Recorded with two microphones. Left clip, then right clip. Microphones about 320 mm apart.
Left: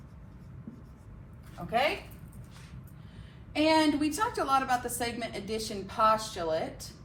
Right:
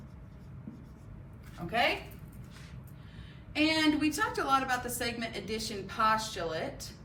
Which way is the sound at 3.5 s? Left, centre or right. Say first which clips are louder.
Left 3 dB; centre.